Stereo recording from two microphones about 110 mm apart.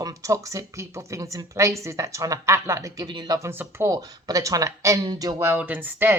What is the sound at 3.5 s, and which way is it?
Speech, 20° right (ahead or behind).